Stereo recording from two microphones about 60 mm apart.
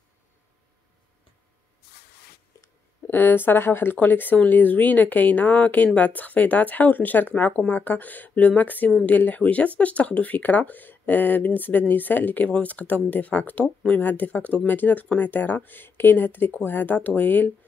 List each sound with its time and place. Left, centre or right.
3.1 s speech: left